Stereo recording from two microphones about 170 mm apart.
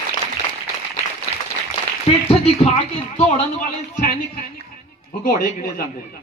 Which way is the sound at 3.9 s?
55° left (ahead or behind).